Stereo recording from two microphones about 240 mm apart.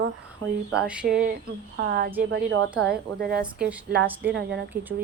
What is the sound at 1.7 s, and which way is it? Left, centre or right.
Speech, right.